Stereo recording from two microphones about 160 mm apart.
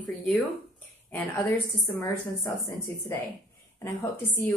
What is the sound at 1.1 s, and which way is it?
A woman's voice, 15° left (ahead or behind).